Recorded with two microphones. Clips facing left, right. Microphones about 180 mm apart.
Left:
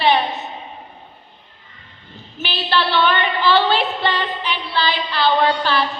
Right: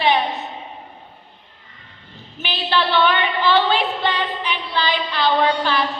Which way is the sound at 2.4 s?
15° right (ahead or behind).